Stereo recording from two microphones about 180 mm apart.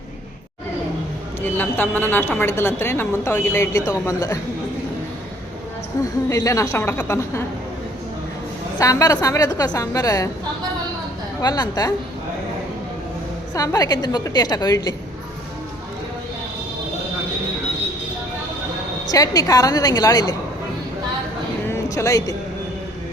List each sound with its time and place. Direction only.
1.4 s a woman's voice: 10° left (ahead or behind)
6.0 s a woman's voice: 20° left (ahead or behind)
8.8 s a woman's voice: 20° left (ahead or behind)
11.4 s a woman's voice: 20° left (ahead or behind)
13.5 s a woman's voice: 20° left (ahead or behind)
19.0 s a woman's voice: 20° left (ahead or behind)
21.7 s a sound: 15° left (ahead or behind)